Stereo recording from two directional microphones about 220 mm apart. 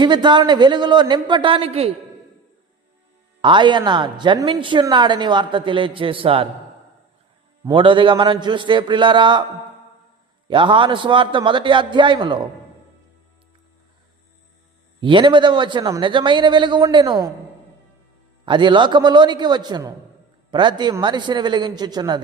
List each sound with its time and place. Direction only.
0.0 s a woman's voice: 20° right (ahead or behind)
3.4 s a woman's voice: 20° right (ahead or behind)
7.6 s a woman's voice: 20° right (ahead or behind)
10.5 s a woman's voice: 20° right (ahead or behind)
15.0 s a woman's voice: 20° right (ahead or behind)
18.4 s a woman's voice: 20° right (ahead or behind)